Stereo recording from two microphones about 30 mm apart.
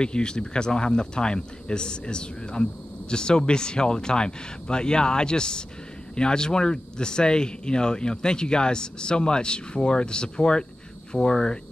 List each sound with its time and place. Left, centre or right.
0.0 s speech: left